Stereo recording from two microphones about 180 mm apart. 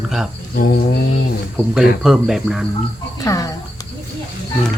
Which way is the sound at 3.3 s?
20° left (ahead or behind).